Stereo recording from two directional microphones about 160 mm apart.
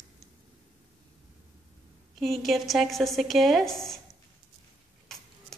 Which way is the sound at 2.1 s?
Centre (ahead or behind).